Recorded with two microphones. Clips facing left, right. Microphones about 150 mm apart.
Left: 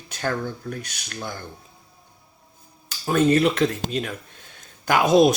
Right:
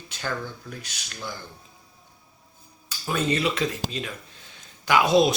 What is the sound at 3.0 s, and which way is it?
Speech, 50° left (ahead or behind).